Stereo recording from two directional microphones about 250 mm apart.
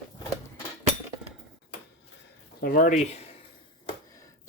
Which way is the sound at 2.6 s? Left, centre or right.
Left.